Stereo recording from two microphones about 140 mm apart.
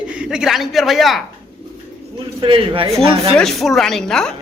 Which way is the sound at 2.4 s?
40° right (ahead or behind).